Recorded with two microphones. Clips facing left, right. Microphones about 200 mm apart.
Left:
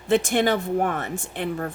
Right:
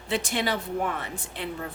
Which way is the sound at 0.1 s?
50° left (ahead or behind).